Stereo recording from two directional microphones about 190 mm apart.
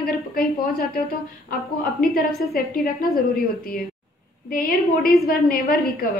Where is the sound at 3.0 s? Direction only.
50° left (ahead or behind).